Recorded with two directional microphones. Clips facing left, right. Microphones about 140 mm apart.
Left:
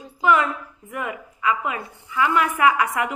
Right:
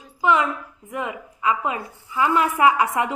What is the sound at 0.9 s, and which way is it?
A woman's voice, 20° right (ahead or behind).